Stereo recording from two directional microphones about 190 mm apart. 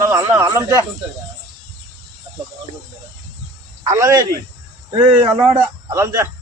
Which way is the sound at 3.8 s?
15° right (ahead or behind).